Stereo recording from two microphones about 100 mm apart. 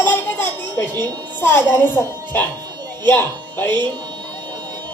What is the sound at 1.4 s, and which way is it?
Speech, 20° left (ahead or behind).